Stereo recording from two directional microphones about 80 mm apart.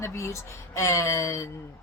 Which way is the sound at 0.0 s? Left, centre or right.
Left.